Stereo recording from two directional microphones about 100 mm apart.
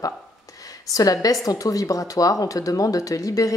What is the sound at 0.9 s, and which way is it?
A woman's voice, 40° left (ahead or behind).